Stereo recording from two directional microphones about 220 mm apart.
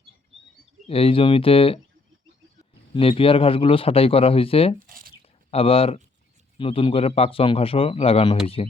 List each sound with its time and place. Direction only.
0.9 s a man's voice: 25° left (ahead or behind)
2.9 s a man's voice: 25° left (ahead or behind)
4.9 s a sound: 40° right (ahead or behind)
5.5 s a man's voice: 25° left (ahead or behind)